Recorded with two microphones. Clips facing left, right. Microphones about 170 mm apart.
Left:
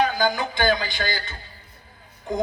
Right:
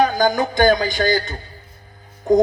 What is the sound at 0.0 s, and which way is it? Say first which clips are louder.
Speech: right 5 dB; 45° right (ahead or behind).